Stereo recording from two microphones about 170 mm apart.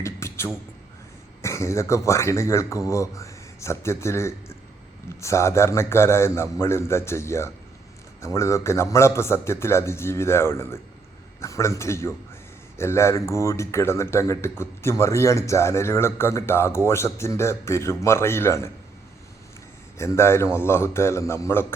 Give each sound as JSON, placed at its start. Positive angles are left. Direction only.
{"t": 0.0, "sound": "a sound", "side_deg": 15}
{"t": 1.4, "sound": "speech", "side_deg": 15}
{"t": 20.0, "sound": "speech", "side_deg": 15}